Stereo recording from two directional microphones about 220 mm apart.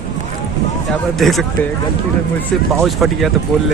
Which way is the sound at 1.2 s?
Centre (ahead or behind).